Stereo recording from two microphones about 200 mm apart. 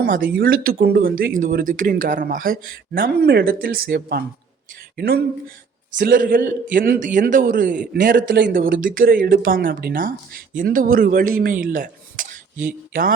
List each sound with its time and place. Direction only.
0.0 s speech: 45° right (ahead or behind)
8.3 s speech: 60° right (ahead or behind)
8.5 s speech: 45° right (ahead or behind)